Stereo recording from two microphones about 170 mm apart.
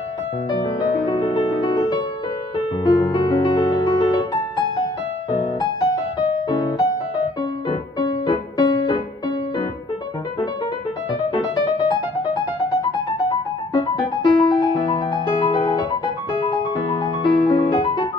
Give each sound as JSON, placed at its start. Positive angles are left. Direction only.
{"t": 0.5, "sound": "music", "side_deg": 25}
{"t": 8.0, "sound": "music", "side_deg": 25}
{"t": 13.7, "sound": "music", "side_deg": 25}